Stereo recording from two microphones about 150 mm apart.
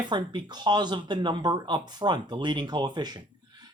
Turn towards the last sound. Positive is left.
turn(degrees=-30)  # may be behind; listen again after turning